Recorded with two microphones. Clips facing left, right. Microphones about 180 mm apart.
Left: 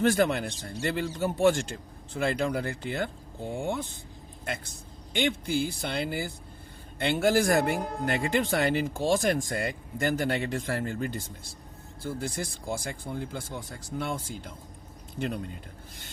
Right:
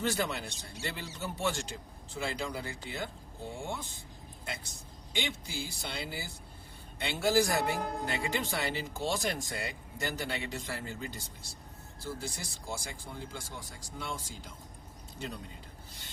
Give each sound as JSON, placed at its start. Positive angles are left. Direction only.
{"t": 0.0, "sound": "speech", "side_deg": 55}